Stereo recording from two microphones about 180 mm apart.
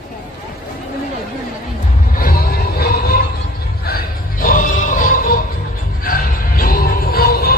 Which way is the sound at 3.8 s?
55° left (ahead or behind).